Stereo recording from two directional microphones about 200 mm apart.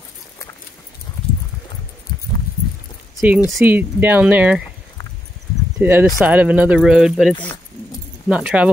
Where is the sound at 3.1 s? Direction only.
5° right (ahead or behind).